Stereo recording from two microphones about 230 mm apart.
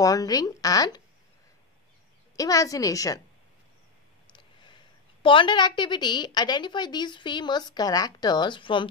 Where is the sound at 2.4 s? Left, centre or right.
Centre.